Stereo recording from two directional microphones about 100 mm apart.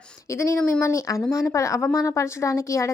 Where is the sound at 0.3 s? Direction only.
25° left (ahead or behind).